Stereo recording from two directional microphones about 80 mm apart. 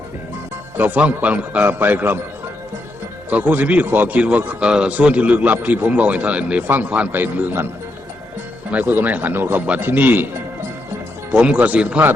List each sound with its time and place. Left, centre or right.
0.8 s a man's voice: centre
3.2 s a man's voice: centre
8.7 s a man's voice: right
11.3 s a man's voice: centre